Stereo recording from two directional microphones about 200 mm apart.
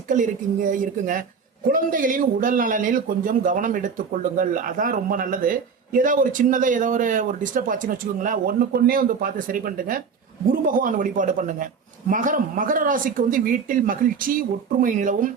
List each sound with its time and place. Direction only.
0.1 s a man's voice: 40° right (ahead or behind)